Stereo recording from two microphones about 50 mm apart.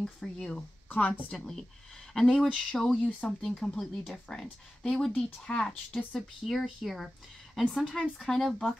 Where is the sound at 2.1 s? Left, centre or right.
Centre.